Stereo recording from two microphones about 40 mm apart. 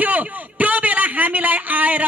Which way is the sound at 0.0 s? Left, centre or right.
Right.